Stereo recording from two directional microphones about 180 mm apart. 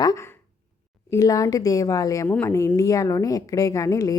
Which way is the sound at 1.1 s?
20° left (ahead or behind).